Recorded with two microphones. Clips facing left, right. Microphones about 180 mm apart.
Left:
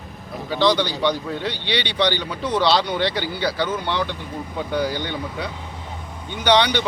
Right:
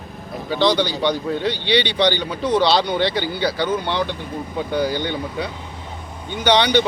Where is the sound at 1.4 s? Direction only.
10° left (ahead or behind).